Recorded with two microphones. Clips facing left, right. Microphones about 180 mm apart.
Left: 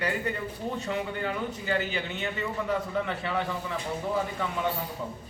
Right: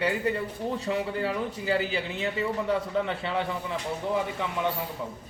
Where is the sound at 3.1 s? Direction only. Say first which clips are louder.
Right 1 dB; 30° right (ahead or behind).